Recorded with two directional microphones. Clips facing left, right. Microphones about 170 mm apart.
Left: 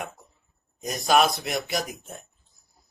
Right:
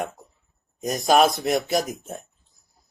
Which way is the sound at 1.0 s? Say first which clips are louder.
Right 3 dB; 40° right (ahead or behind).